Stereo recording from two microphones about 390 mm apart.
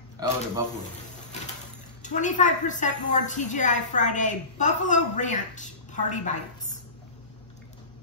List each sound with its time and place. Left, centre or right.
0.2 s a man's voice: centre
2.0 s a woman's voice: centre